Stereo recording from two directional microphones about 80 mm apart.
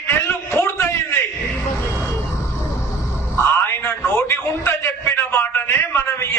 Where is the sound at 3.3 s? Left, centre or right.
Left.